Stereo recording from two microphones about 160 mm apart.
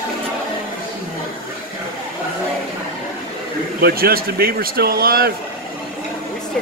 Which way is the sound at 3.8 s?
70° right (ahead or behind).